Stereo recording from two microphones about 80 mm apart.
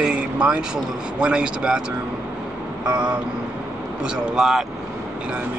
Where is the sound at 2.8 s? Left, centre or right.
Centre.